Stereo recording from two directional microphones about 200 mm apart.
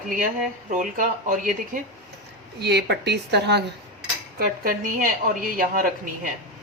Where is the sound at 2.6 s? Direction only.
55° right (ahead or behind).